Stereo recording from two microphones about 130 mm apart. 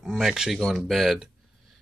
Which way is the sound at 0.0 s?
5° right (ahead or behind).